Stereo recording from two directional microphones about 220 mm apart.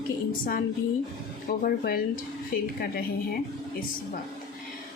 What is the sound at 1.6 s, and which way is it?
A woman's voice, 40° left (ahead or behind).